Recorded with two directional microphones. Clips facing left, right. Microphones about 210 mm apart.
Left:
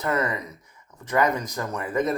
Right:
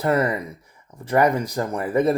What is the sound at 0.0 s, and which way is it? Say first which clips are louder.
Speech: right 5 dB; 30° right (ahead or behind).